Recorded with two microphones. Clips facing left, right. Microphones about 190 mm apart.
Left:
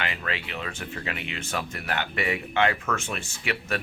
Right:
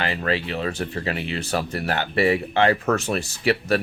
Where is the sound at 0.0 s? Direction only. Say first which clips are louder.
Right 8 dB; 35° right (ahead or behind).